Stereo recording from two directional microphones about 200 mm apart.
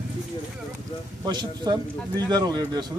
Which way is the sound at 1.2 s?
20° right (ahead or behind).